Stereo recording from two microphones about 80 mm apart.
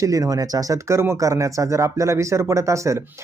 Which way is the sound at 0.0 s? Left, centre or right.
Right.